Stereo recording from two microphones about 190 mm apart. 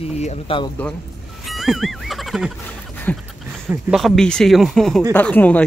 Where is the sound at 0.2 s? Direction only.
30° left (ahead or behind).